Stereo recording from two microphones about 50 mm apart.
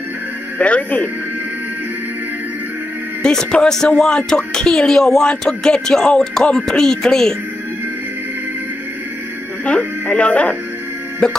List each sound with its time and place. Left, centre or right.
0.6 s speech: left
3.2 s speech: centre
9.7 s speech: left